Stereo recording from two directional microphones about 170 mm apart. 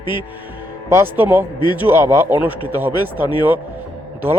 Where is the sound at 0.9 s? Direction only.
15° right (ahead or behind).